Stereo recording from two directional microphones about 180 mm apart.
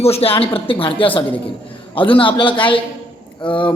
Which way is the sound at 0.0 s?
35° left (ahead or behind).